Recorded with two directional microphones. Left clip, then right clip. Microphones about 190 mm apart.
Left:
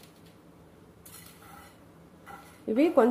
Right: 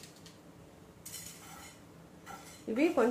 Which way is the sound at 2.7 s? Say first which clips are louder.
Left 8 dB; 55° left (ahead or behind).